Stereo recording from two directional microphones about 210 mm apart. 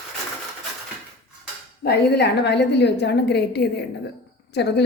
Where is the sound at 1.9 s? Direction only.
50° left (ahead or behind).